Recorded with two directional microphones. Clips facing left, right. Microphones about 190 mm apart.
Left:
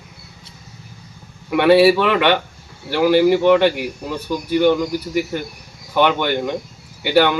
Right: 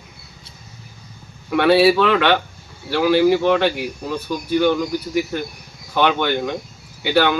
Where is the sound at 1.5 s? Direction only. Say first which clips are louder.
Left 2 dB; 15° left (ahead or behind).